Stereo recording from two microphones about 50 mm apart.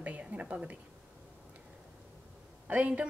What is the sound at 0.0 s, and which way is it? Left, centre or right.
Speech, right.